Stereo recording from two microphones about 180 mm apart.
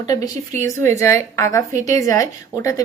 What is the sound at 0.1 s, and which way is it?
A woman's voice, 20° left (ahead or behind).